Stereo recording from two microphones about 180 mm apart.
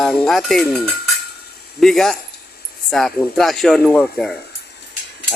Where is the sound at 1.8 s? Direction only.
Centre (ahead or behind).